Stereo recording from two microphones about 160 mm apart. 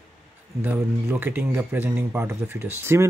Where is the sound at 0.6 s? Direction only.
10° right (ahead or behind).